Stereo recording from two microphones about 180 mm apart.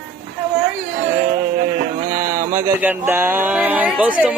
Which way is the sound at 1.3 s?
45° right (ahead or behind).